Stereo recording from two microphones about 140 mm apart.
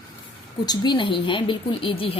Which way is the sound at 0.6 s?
30° left (ahead or behind).